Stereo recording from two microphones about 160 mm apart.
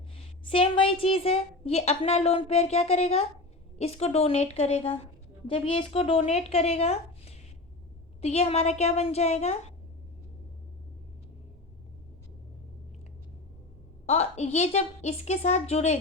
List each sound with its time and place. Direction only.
0.5 s a woman's voice: 35° left (ahead or behind)
14.1 s a woman's voice: 45° left (ahead or behind)